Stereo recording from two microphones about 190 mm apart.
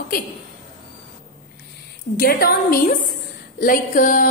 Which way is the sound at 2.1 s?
50° left (ahead or behind).